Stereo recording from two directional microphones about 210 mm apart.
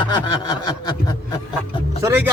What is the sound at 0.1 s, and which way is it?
Snicker, 20° left (ahead or behind).